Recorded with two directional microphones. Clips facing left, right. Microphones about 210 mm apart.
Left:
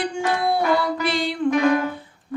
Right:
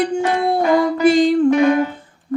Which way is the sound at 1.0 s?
45° right (ahead or behind).